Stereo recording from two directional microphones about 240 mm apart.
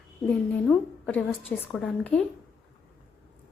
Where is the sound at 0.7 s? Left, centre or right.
Centre.